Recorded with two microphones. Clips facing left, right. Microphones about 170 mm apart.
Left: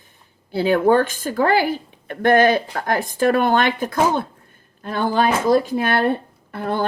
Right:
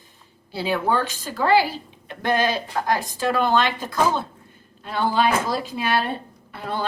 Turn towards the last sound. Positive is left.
turn(degrees=55)  # may be behind; listen again after turning